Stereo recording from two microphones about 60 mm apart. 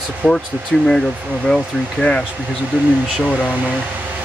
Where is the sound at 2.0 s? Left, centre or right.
Centre.